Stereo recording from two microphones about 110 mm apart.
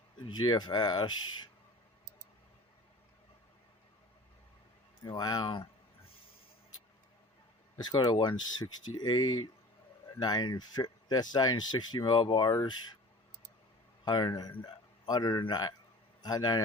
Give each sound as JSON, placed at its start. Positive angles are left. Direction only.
{"t": 0.3, "sound": "speech", "side_deg": 45}
{"t": 5.0, "sound": "speech", "side_deg": 35}
{"t": 7.8, "sound": "speech", "side_deg": 40}
{"t": 14.0, "sound": "a man's voice", "side_deg": 40}